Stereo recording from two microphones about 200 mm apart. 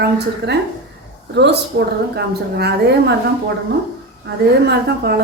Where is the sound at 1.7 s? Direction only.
60° right (ahead or behind).